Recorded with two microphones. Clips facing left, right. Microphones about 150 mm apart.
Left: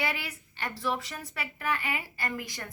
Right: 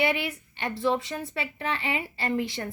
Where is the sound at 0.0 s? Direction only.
20° right (ahead or behind).